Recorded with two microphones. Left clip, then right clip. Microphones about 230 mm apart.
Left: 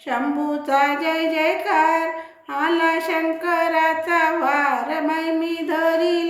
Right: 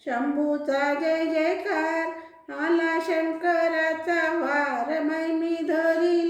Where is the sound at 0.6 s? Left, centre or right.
Centre.